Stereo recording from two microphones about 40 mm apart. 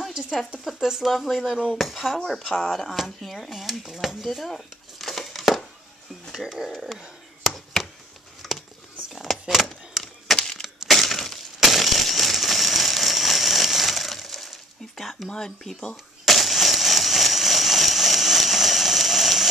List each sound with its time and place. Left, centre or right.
0.7 s speech: centre
2.3 s speech: centre
4.2 s a sound: centre
6.3 s speech: centre
7.5 s chop: centre
8.4 s a sound: centre
9.1 s keys jangling: centre
10.3 s crushing: centre
10.9 s crushing: centre
14.5 s a sound: centre
15.2 s speech: centre
16.3 s a sound: centre